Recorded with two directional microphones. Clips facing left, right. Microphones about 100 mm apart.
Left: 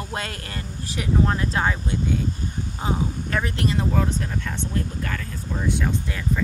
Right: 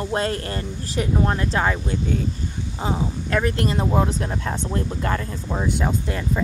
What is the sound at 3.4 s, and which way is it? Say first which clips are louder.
Speech: right 3 dB; 40° right (ahead or behind).